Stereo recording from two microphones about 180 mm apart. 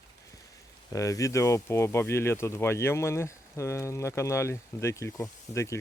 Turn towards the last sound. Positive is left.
turn(degrees=15)  # may be behind; listen again after turning